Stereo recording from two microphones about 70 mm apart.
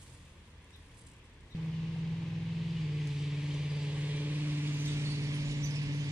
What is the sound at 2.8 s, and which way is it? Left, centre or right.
Vehicle, centre.